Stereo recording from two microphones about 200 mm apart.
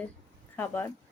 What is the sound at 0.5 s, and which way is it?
Speech, 10° left (ahead or behind).